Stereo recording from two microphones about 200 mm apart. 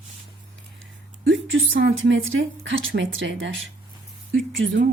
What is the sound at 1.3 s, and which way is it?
A woman's voice, 70° right (ahead or behind).